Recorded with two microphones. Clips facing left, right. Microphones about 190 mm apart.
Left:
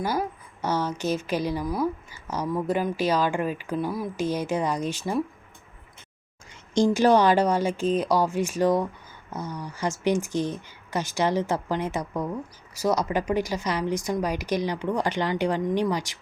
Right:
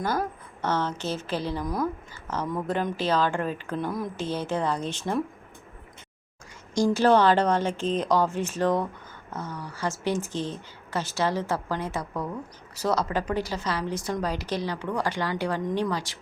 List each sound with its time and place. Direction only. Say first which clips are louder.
0.0 s a woman's voice: left 1 dB; 10° left (ahead or behind)
6.7 s a woman's voice: left 1 dB; 20° left (ahead or behind)